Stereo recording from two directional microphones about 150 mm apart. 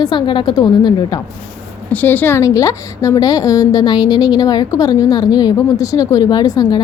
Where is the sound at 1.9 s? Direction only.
10° left (ahead or behind).